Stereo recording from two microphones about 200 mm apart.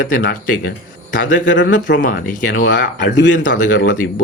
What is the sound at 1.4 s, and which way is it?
Speech, 65° left (ahead or behind).